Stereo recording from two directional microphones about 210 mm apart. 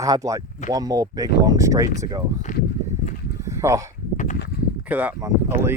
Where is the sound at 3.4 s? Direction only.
15° right (ahead or behind).